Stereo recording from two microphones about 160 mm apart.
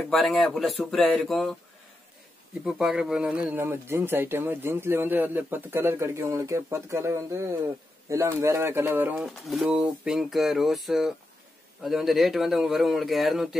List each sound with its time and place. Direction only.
0.0 s speech: centre (ahead or behind)
2.6 s speech: 5° right (ahead or behind)
9.2 s speech: centre (ahead or behind)